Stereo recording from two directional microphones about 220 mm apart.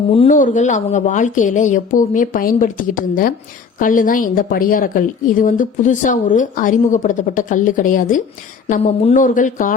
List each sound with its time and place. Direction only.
0.1 s a woman's voice: 30° left (ahead or behind)
8.6 s a woman's voice: 25° left (ahead or behind)